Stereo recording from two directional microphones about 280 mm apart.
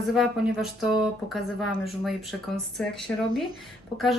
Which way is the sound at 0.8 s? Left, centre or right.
Centre.